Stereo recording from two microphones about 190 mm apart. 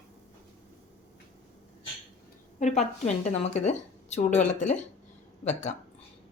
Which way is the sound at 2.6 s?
35° left (ahead or behind).